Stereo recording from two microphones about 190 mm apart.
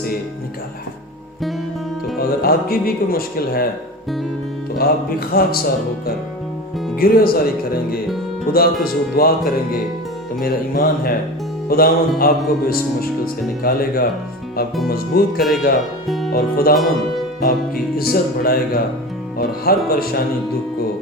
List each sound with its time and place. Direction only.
2.1 s speech: 55° left (ahead or behind)
5.3 s music: 50° left (ahead or behind)
16.0 s music: centre (ahead or behind)
16.3 s music: 50° left (ahead or behind)
17.9 s music: 50° left (ahead or behind)